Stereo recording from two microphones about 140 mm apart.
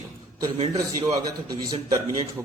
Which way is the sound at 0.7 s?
25° right (ahead or behind).